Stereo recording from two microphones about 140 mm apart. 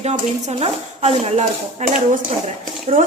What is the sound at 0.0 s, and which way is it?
Speech, 50° right (ahead or behind).